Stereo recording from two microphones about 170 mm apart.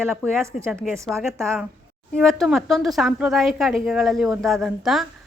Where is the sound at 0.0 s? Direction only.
15° right (ahead or behind).